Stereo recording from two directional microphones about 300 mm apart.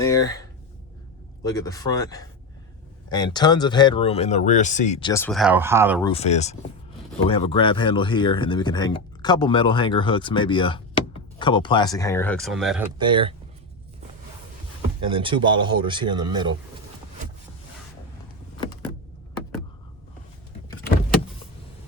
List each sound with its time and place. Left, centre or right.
0.0 s a sound: centre
1.5 s speech: centre
6.0 s speech: centre
13.0 s speech: centre
15.1 s speech: centre